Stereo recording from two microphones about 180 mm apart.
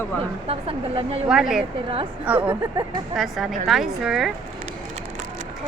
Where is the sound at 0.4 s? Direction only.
30° right (ahead or behind).